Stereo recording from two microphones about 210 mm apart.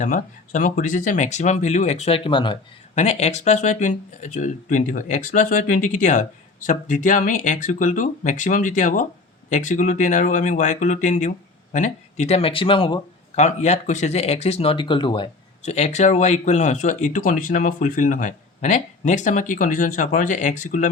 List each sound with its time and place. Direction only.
0.0 s speech: 35° left (ahead or behind)